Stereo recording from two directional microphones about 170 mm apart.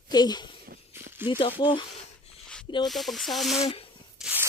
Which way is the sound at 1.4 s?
30° left (ahead or behind).